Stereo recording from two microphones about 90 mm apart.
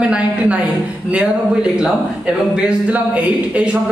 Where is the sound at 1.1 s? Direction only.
10° right (ahead or behind).